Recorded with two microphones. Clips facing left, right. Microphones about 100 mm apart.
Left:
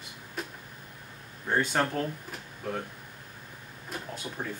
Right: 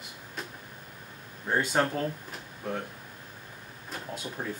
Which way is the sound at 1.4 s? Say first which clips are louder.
Right 1 dB; 10° right (ahead or behind).